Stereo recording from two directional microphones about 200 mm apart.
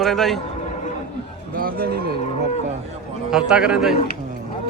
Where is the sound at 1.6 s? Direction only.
45° right (ahead or behind).